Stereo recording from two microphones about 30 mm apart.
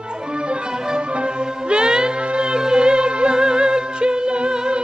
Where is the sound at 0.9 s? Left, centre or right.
Right.